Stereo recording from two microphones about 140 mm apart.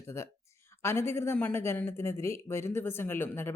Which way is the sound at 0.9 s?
20° left (ahead or behind).